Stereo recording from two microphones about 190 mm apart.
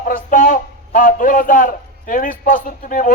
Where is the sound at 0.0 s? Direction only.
45° left (ahead or behind).